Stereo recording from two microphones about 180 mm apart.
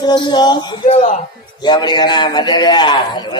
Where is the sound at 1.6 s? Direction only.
25° left (ahead or behind).